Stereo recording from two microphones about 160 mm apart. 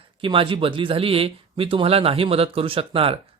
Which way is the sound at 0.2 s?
30° right (ahead or behind).